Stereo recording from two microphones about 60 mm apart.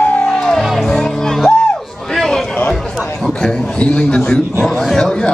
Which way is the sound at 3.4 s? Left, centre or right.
Centre.